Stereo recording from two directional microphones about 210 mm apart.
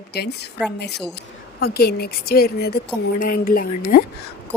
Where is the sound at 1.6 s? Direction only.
45° left (ahead or behind).